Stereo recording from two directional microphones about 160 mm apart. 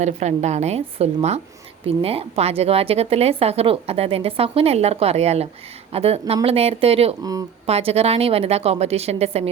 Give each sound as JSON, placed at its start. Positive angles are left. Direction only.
{"t": 0.0, "sound": "a woman's voice", "side_deg": -45}
{"t": 7.2, "sound": "speech", "side_deg": -20}
{"t": 7.7, "sound": "a woman's voice", "side_deg": -40}